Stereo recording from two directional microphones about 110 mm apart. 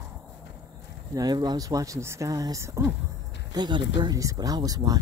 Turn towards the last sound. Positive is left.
turn(degrees=-35)  # may be behind; listen again after turning